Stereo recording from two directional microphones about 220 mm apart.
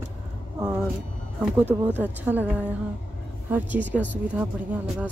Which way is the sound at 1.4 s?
10° left (ahead or behind).